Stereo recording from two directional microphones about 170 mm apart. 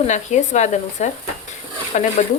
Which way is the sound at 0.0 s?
45° left (ahead or behind).